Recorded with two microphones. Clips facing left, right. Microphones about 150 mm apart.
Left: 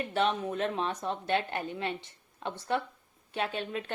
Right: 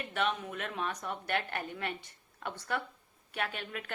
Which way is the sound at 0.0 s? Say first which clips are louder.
Left 5 dB; 30° left (ahead or behind).